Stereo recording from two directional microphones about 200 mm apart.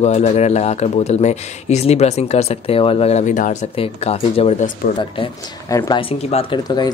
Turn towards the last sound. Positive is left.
turn(degrees=20)  # may be behind; listen again after turning